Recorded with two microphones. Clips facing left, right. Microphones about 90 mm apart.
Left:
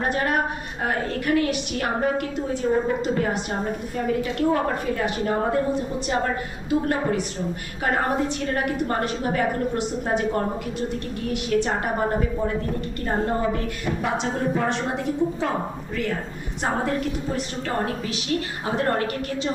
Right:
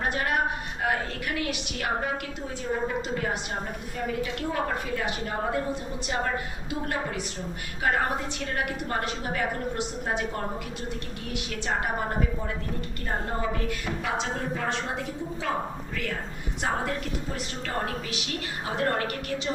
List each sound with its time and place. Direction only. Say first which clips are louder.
0.0 s a woman's voice: left 4 dB; 40° left (ahead or behind)
4.4 s speech: left 7 dB; 45° left (ahead or behind)
6.7 s a woman's voice: left 9 dB; 40° left (ahead or behind)
8.5 s a woman's voice: left 4 dB; 40° left (ahead or behind)
11.5 s a woman's voice: left 14 dB; 35° left (ahead or behind)
17.8 s a woman's voice: left 6 dB; 35° left (ahead or behind)